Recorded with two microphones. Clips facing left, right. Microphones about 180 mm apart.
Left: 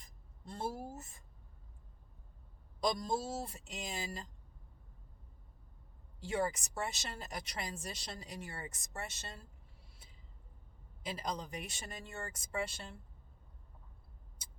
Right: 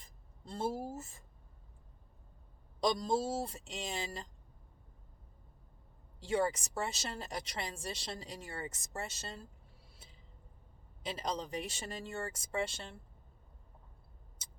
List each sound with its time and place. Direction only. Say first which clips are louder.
0.0 s a sound: even; 30° right (ahead or behind)
0.9 s speech: right 4 dB; 30° right (ahead or behind)
2.8 s a woman's voice: right 3 dB; 30° right (ahead or behind)
6.4 s a woman's voice: right 2 dB; 30° right (ahead or behind)
11.3 s a woman's voice: right 5 dB; 30° right (ahead or behind)